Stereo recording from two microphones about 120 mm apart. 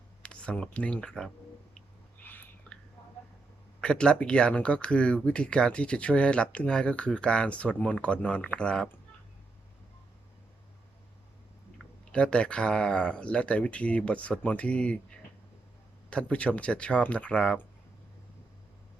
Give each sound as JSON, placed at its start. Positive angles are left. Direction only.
{"t": 0.2, "sound": "speech", "side_deg": 10}
{"t": 2.2, "sound": "a sound", "side_deg": 15}
{"t": 3.8, "sound": "speech", "side_deg": 10}
{"t": 11.8, "sound": "speech", "side_deg": 10}
{"t": 16.0, "sound": "speech", "side_deg": 10}